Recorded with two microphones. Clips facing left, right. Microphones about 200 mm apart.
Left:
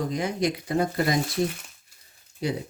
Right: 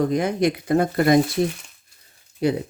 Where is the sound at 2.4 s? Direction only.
55° right (ahead or behind).